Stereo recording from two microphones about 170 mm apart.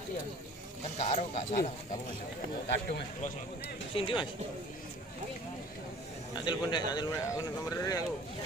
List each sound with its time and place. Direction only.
0.9 s speech: 40° left (ahead or behind)
3.9 s speech: 30° left (ahead or behind)
6.3 s speech: 25° left (ahead or behind)